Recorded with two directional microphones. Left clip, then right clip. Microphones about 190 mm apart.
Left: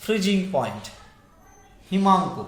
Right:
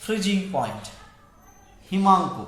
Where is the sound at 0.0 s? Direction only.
50° left (ahead or behind).